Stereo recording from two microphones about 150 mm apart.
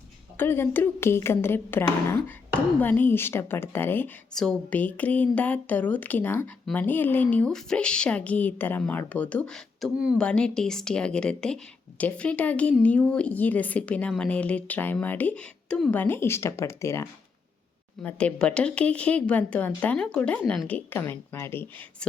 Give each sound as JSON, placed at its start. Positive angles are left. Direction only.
{"t": 0.3, "sound": "a woman's voice", "side_deg": 15}
{"t": 18.0, "sound": "a woman's voice", "side_deg": 5}